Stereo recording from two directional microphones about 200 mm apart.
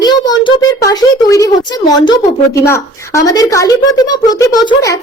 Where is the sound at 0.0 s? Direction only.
20° left (ahead or behind).